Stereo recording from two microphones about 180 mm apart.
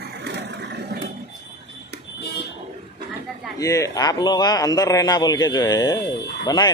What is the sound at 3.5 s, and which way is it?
A man's voice, 20° left (ahead or behind).